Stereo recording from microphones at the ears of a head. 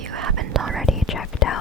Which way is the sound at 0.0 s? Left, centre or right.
Right.